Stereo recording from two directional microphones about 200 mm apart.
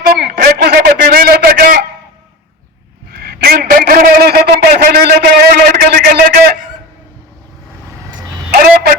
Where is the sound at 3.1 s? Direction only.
50° right (ahead or behind).